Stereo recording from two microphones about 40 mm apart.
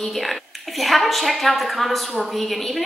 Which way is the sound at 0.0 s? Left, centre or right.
Centre.